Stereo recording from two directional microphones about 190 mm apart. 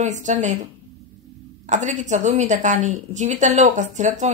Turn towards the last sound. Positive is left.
turn(degrees=-40)  # may be behind; listen again after turning